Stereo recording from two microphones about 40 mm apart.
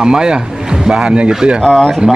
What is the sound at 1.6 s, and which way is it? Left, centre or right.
Speech, left.